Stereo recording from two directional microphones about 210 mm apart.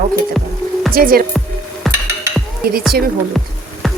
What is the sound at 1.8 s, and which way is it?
Music, centre (ahead or behind).